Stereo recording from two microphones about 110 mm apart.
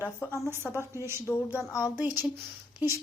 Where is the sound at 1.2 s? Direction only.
25° left (ahead or behind).